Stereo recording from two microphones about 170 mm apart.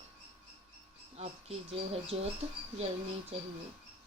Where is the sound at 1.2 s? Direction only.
35° right (ahead or behind).